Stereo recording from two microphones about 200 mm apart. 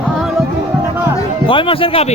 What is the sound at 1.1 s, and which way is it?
Speech, 25° left (ahead or behind).